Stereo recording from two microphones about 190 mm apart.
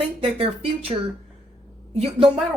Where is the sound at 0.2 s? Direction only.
30° right (ahead or behind).